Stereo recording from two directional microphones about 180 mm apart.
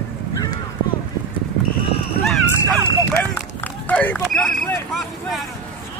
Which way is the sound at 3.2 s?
10° left (ahead or behind).